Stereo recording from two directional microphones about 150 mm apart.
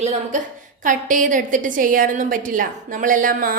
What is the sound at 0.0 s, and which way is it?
A woman's voice, 50° right (ahead or behind).